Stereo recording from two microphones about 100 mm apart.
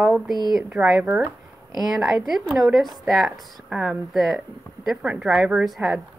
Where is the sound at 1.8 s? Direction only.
5° right (ahead or behind).